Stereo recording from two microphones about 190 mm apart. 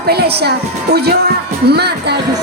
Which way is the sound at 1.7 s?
60° right (ahead or behind).